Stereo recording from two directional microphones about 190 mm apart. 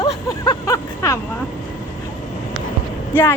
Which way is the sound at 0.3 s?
15° left (ahead or behind).